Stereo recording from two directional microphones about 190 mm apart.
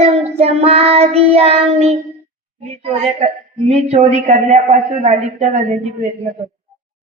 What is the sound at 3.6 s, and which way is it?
A woman's voice, 35° right (ahead or behind).